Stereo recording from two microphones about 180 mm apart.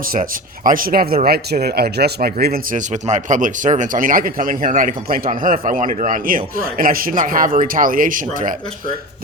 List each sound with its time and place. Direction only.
0.1 s speech: 50° right (ahead or behind)